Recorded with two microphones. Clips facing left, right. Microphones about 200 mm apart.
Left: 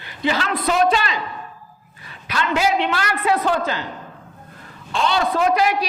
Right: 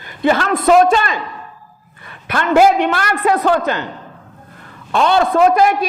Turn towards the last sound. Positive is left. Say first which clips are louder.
# right 6 dB
turn(degrees=-50)  # may be behind; listen again after turning